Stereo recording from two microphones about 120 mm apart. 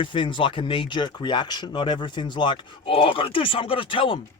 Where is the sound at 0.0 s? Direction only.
45° left (ahead or behind).